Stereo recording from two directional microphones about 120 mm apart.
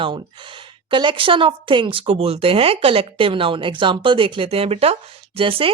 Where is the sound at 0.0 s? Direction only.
45° right (ahead or behind).